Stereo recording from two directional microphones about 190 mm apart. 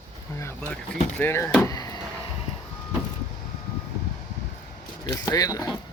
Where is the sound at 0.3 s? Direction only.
10° left (ahead or behind).